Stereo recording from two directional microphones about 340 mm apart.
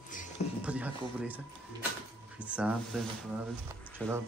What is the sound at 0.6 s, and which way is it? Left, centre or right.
A man's voice, centre.